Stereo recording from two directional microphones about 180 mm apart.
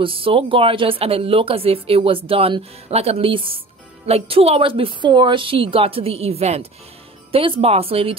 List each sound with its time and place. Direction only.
0.0 s speech: 30° right (ahead or behind)